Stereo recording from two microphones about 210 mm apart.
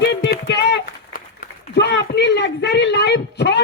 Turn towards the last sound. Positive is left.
turn(degrees=55)  # may be behind; listen again after turning